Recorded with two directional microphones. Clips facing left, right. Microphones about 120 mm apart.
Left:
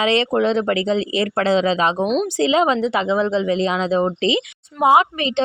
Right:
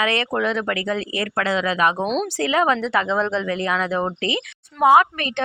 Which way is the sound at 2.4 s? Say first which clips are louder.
Left 3 dB; 20° left (ahead or behind).